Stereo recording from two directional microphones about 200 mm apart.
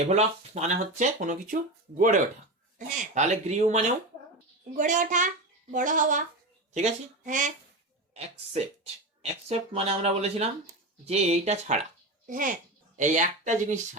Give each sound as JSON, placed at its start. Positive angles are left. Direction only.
{"t": 0.1, "sound": "a child's voice", "side_deg": -35}